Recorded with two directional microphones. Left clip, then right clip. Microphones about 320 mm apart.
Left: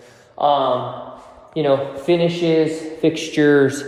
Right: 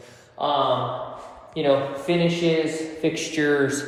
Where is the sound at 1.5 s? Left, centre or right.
Left.